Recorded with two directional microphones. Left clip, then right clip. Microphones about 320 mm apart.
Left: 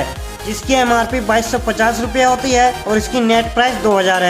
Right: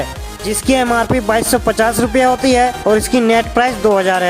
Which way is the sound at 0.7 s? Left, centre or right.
Right.